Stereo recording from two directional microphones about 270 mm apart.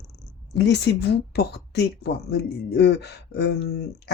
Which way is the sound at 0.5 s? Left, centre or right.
Left.